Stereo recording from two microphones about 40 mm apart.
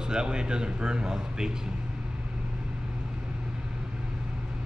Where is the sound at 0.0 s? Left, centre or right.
Right.